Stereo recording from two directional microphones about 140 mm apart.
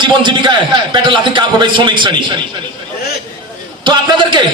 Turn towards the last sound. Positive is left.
turn(degrees=-35)  # may be behind; listen again after turning